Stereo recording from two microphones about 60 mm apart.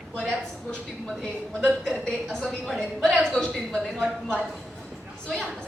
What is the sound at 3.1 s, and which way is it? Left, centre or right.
Speech, left.